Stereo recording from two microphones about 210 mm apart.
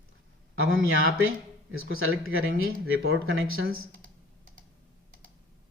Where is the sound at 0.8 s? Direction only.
70° right (ahead or behind).